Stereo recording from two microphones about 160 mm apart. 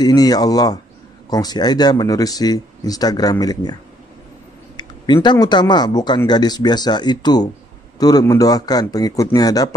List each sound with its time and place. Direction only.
0.0 s speech: 25° left (ahead or behind)
4.7 s speech: 25° left (ahead or behind)